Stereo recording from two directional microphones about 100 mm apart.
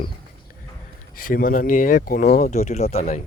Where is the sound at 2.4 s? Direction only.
90° left.